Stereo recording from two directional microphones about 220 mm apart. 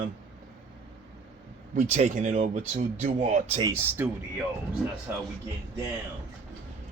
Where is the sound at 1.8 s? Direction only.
30° right (ahead or behind).